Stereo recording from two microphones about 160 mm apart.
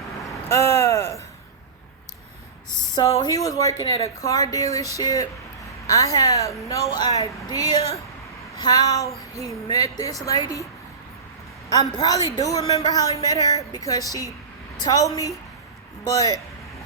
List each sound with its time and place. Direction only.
0.5 s a sound: 20° left (ahead or behind)
2.9 s a woman's voice: 20° left (ahead or behind)
11.9 s a woman's voice: 25° left (ahead or behind)